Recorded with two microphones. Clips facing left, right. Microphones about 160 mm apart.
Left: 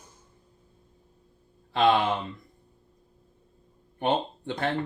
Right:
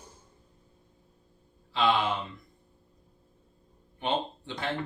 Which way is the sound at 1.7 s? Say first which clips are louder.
Left 4 dB; 60° left (ahead or behind).